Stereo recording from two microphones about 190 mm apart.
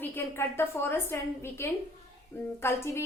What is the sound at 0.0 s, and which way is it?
A woman's voice, 10° left (ahead or behind).